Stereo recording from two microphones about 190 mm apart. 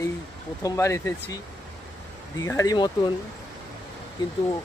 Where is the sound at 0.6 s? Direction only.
15° left (ahead or behind).